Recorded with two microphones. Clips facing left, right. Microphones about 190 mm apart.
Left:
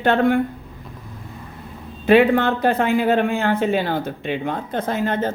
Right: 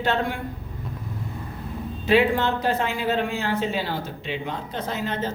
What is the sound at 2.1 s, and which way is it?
Speech, 60° left (ahead or behind).